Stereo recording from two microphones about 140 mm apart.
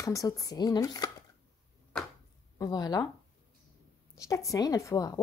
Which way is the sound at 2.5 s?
25° left (ahead or behind).